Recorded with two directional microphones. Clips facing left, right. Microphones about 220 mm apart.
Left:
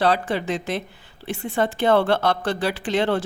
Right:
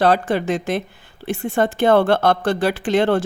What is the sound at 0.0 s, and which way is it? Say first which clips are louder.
A woman's voice: right 4 dB; 50° right (ahead or behind).